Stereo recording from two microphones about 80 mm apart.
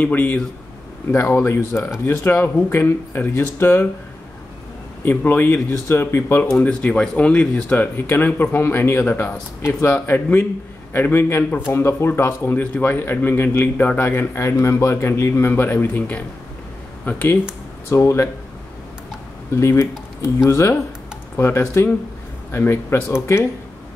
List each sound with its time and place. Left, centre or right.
0.0 s a man's voice: left
1.1 s a man's voice: left
5.0 s a man's voice: left
5.5 s speech: left
6.6 s speech: centre
7.7 s a man's voice: left
17.8 s speech: left
19.5 s speech: left